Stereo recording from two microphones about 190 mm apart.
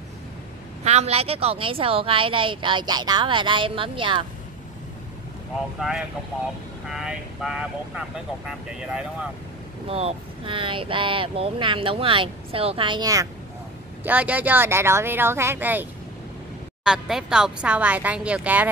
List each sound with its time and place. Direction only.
0.8 s speech: 35° right (ahead or behind)
5.8 s speech: 5° right (ahead or behind)
9.8 s speech: 30° right (ahead or behind); by 18.7 s 10° right (ahead or behind)